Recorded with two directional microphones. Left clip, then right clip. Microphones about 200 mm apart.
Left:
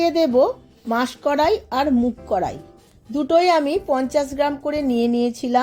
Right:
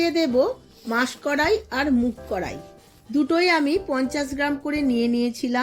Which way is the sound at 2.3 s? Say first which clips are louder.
Left 6 dB; 30° left (ahead or behind).